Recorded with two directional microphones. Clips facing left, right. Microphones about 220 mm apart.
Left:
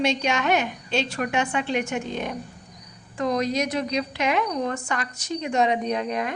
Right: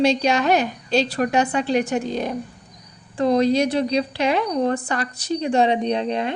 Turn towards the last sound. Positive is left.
turn(degrees=-30)  # may be behind; listen again after turning